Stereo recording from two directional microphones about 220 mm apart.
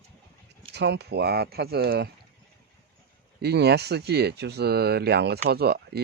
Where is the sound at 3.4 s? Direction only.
50° right (ahead or behind).